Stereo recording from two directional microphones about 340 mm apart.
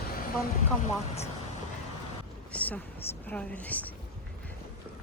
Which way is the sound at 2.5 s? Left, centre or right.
Centre.